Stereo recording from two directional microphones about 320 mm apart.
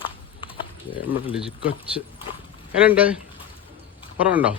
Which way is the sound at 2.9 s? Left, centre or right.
Centre.